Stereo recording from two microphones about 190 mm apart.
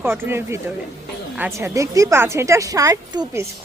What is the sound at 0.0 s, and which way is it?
Speech, 10° right (ahead or behind).